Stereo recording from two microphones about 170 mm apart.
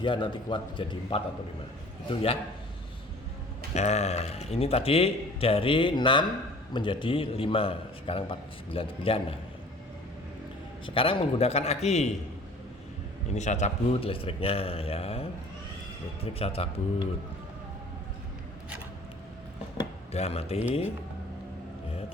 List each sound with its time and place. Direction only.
0.0 s a man's voice: 30° left (ahead or behind)
3.8 s a man's voice: 40° left (ahead or behind)
10.8 s a man's voice: 30° left (ahead or behind)
13.3 s a man's voice: 45° left (ahead or behind)
20.1 s a man's voice: 40° left (ahead or behind)